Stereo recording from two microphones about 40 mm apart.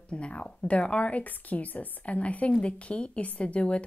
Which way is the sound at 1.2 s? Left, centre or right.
Left.